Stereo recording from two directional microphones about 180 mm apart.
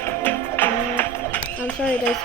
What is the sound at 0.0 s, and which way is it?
Music, 10° left (ahead or behind).